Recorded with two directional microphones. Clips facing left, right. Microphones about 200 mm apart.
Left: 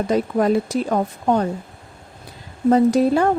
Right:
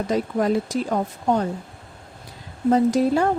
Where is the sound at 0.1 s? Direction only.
60° left (ahead or behind).